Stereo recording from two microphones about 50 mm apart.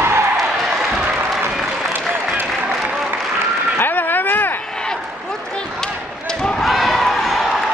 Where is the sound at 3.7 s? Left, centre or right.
Left.